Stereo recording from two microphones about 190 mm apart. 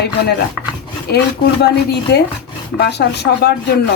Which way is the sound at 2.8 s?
60° left (ahead or behind).